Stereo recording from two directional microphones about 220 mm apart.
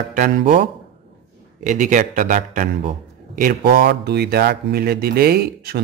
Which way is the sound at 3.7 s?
45° right (ahead or behind).